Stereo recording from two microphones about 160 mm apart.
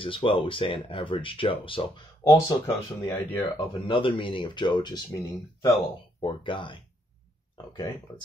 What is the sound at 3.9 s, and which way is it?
Speech, 35° left (ahead or behind).